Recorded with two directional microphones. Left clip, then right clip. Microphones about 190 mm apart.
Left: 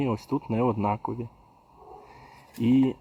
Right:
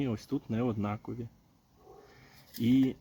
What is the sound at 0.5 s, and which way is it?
Speech, 15° left (ahead or behind).